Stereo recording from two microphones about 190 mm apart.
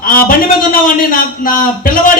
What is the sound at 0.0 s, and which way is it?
A man's voice, 50° left (ahead or behind).